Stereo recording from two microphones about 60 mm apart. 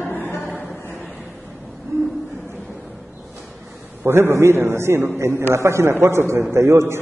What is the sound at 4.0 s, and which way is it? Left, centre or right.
A man's voice, right.